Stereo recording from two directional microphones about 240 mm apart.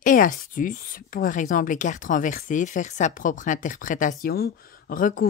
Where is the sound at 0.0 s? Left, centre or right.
Left.